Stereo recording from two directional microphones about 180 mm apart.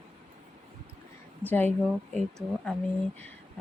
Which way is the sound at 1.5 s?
10° left (ahead or behind).